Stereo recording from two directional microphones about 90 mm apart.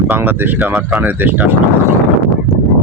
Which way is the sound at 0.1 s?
20° right (ahead or behind).